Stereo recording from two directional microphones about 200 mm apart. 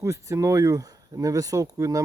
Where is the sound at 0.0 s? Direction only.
15° right (ahead or behind).